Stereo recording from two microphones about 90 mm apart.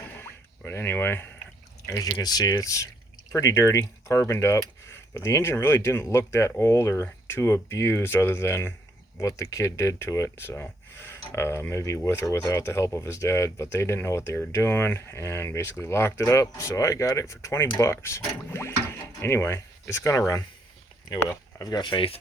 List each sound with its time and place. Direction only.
0.2 s a sound: 25° left (ahead or behind)
1.9 s speech: 35° left (ahead or behind)
21.6 s speech: 55° left (ahead or behind); by 22.2 s 80° left